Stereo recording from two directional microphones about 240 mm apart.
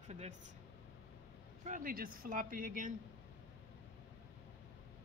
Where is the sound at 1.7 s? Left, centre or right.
Right.